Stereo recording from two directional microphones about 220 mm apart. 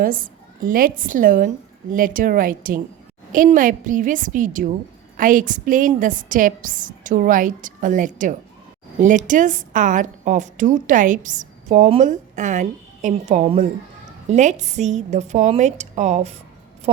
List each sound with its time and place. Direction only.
0.0 s a woman's voice: 40° right (ahead or behind)